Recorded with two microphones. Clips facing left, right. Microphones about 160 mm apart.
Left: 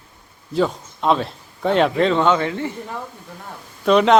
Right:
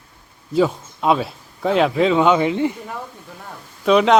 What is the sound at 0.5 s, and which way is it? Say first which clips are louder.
Speech: right 2 dB; 5° right (ahead or behind).